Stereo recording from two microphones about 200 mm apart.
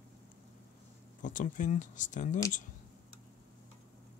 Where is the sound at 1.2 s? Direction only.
40° left (ahead or behind).